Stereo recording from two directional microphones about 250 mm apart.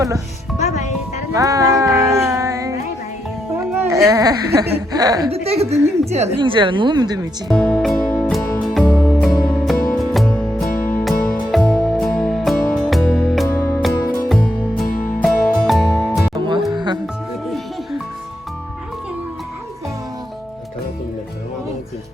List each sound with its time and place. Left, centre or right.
0.6 s music: left
1.3 s music: centre
3.5 s speech: centre
7.4 s music: centre
14.8 s music: left
15.2 s music: centre
16.3 s music: centre